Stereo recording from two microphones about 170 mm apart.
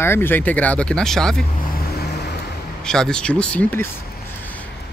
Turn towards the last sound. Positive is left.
turn(degrees=10)  # may be behind; listen again after turning